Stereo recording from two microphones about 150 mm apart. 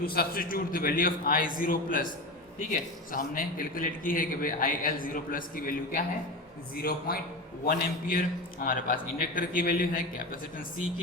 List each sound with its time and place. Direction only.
0.0 s a man's voice: 90° left; by 6.0 s 70° left (ahead or behind)
6.7 s a man's voice: 85° left; by 10.2 s 70° left (ahead or behind)